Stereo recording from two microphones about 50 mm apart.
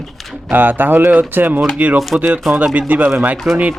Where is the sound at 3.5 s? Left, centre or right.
Centre.